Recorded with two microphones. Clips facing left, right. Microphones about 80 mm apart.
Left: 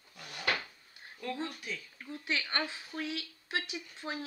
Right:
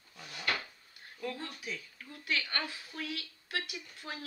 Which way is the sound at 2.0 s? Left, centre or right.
Left.